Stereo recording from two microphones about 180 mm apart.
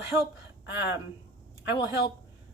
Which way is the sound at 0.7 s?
10° right (ahead or behind).